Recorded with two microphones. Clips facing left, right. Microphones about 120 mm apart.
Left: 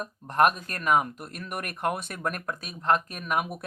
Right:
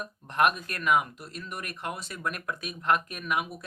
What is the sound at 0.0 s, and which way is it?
Speech, 40° left (ahead or behind).